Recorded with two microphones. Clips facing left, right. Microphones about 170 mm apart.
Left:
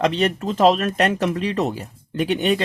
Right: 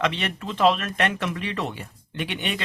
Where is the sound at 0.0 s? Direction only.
40° left (ahead or behind).